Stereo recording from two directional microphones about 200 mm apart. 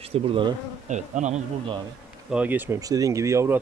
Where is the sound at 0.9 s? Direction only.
35° right (ahead or behind).